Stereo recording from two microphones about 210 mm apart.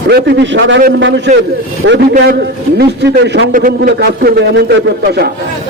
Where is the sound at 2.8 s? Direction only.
50° right (ahead or behind).